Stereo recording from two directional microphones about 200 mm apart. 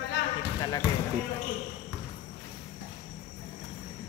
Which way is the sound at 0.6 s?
15° left (ahead or behind).